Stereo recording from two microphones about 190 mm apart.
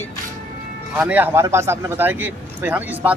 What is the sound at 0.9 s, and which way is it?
A man's voice, 10° right (ahead or behind).